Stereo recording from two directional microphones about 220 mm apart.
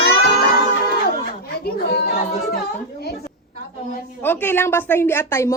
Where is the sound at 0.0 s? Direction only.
45° left (ahead or behind).